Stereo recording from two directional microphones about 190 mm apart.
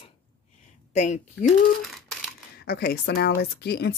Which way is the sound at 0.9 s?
40° left (ahead or behind).